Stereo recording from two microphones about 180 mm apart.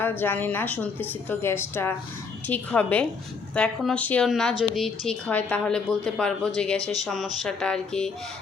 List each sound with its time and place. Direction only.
0.2 s a woman's voice: 10° left (ahead or behind)